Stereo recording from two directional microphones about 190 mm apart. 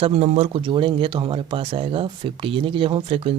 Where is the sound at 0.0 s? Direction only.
30° right (ahead or behind).